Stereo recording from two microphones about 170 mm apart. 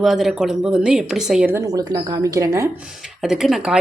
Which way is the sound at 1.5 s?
20° right (ahead or behind).